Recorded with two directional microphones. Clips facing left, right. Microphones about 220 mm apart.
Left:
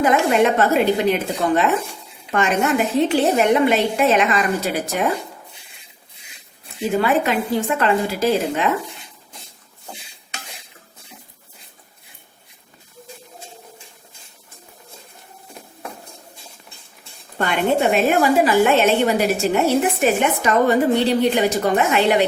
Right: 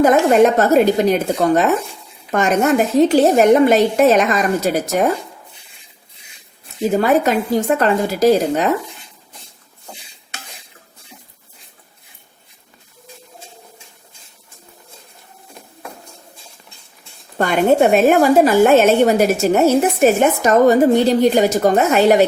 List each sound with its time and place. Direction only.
0.0 s speech: 40° right (ahead or behind)
7.0 s speech: 40° right (ahead or behind)
17.3 s a woman's voice: 45° right (ahead or behind)